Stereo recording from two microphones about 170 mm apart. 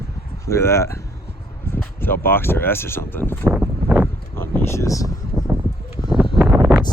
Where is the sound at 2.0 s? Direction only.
15° left (ahead or behind).